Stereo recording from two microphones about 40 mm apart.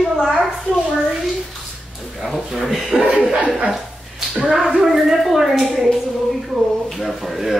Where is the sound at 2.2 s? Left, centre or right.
Centre.